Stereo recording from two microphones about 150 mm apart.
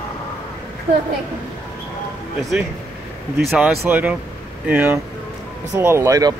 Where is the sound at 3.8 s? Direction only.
10° right (ahead or behind).